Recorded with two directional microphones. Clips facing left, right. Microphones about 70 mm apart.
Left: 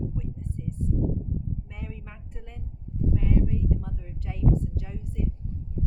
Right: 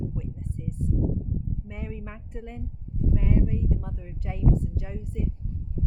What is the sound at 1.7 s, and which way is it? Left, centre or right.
Speech, right.